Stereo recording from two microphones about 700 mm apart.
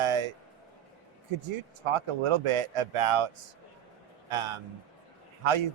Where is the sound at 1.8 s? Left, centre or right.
Right.